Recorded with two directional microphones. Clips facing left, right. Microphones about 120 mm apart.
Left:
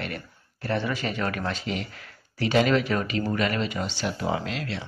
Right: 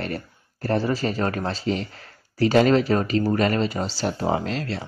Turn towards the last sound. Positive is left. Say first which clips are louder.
# right 4 dB
turn(degrees=-40)  # may be behind; listen again after turning